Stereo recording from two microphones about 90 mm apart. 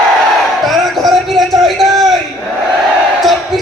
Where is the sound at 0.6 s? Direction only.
Centre (ahead or behind).